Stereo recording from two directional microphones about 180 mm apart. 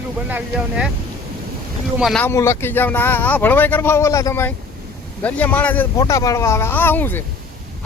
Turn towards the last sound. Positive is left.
turn(degrees=10)  # may be behind; listen again after turning